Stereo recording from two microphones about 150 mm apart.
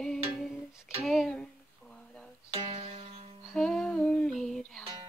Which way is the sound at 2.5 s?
35° right (ahead or behind).